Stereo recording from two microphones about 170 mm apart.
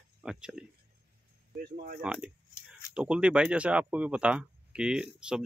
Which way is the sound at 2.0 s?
5° right (ahead or behind).